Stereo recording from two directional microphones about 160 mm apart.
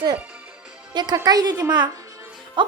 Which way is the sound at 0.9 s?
25° right (ahead or behind).